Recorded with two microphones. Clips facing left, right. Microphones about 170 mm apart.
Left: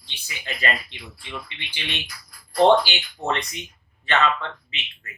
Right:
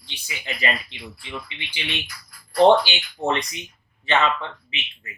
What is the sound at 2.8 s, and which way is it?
Speech, 15° right (ahead or behind).